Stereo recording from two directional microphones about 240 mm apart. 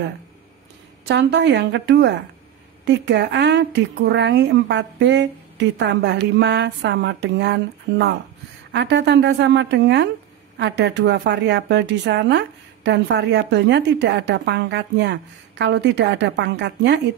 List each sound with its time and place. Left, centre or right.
1.0 s a woman's voice: right
8.7 s a woman's voice: right